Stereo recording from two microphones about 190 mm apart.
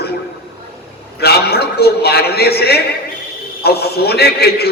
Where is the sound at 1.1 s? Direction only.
60° left (ahead or behind).